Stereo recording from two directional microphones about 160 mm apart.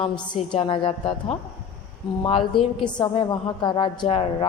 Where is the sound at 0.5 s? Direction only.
30° left (ahead or behind).